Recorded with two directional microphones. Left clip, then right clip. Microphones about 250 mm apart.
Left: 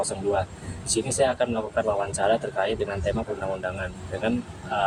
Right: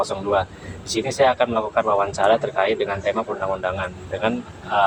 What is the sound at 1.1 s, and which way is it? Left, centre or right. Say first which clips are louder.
Speech: right 6 dB; centre.